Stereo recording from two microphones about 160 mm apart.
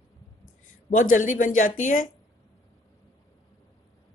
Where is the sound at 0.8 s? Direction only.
55° left (ahead or behind).